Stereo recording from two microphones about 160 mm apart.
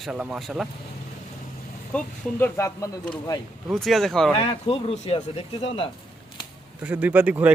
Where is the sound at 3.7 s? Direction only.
Centre (ahead or behind).